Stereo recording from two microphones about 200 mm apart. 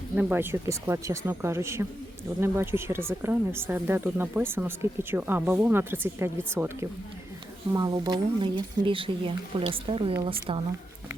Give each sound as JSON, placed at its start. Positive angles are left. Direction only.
{"t": 0.2, "sound": "speech", "side_deg": -10}